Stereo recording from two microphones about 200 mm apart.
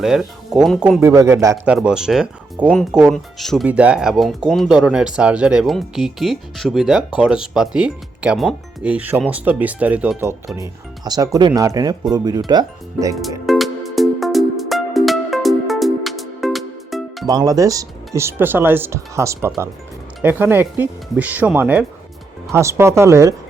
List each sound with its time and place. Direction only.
0.0 s speech: centre (ahead or behind); by 13.1 s 20° right (ahead or behind)
13.5 s music: centre (ahead or behind)
17.2 s speech: 20° right (ahead or behind)